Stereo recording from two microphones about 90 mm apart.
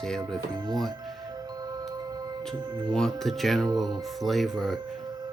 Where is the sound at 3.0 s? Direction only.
5° left (ahead or behind).